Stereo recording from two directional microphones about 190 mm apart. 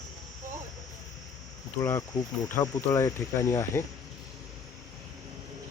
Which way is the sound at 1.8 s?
15° left (ahead or behind).